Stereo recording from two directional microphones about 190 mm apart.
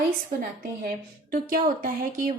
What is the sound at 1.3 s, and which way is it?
A woman's voice, 45° right (ahead or behind).